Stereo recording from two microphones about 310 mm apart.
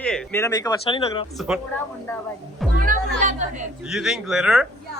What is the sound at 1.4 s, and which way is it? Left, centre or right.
Speech, centre.